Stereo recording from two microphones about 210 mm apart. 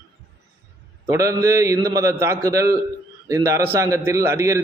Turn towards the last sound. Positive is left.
turn(degrees=-15)  # may be behind; listen again after turning